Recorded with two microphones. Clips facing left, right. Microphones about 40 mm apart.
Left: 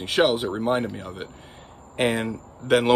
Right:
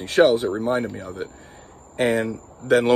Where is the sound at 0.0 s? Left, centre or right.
Left.